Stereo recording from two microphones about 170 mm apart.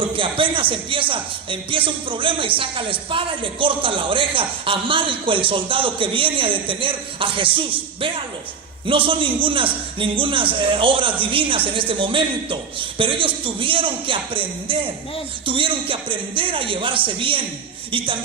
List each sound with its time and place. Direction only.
0.0 s a man's voice: 30° right (ahead or behind)